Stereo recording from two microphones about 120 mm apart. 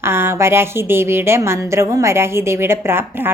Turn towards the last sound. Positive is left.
turn(degrees=-20)  # may be behind; listen again after turning